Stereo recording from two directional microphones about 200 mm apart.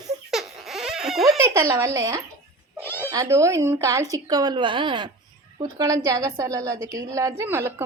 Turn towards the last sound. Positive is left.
turn(degrees=-15)  # may be behind; listen again after turning